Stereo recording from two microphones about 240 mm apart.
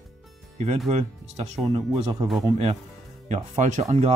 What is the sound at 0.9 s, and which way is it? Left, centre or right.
Speech, right.